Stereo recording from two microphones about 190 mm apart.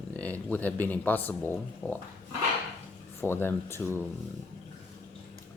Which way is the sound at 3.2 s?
10° left (ahead or behind).